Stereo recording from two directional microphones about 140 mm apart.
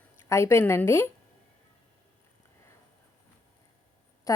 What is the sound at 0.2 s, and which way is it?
Speech, 20° left (ahead or behind).